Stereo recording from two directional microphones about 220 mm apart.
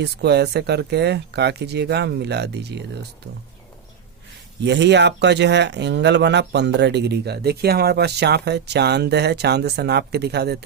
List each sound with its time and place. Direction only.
0.0 s speech: 50° right (ahead or behind)
4.6 s speech: 50° right (ahead or behind)